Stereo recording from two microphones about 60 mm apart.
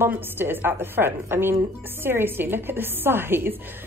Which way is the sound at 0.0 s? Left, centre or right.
Right.